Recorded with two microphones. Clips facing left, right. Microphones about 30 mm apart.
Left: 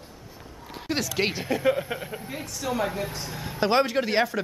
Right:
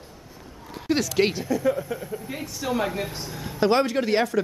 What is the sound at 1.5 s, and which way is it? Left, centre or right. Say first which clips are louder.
Speech: even; left.